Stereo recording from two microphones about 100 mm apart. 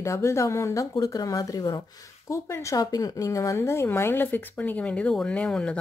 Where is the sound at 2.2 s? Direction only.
30° left (ahead or behind).